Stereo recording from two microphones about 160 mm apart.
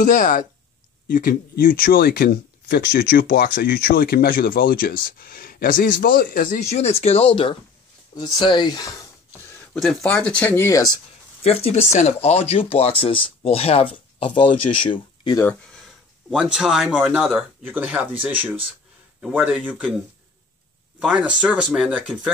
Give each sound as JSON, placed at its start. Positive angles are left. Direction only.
{"t": 0.0, "sound": "speech", "side_deg": 55}
{"t": 6.6, "sound": "speech", "side_deg": 40}
{"t": 9.8, "sound": "speech", "side_deg": 5}
{"t": 11.4, "sound": "speech", "side_deg": 45}
{"t": 15.4, "sound": "speech", "side_deg": 5}
{"t": 21.0, "sound": "speech", "side_deg": -5}